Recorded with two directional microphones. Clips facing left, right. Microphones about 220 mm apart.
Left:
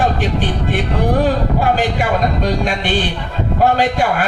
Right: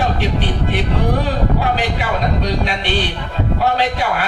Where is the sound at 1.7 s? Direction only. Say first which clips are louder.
Left 3 dB; 45° left (ahead or behind).